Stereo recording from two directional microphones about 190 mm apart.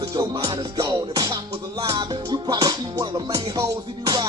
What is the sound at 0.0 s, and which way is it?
Music, 20° right (ahead or behind).